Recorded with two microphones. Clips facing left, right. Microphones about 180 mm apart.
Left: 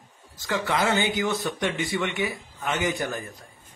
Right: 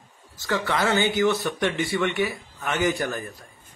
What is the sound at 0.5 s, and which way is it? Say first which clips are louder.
Speech: right 1 dB; 15° left (ahead or behind).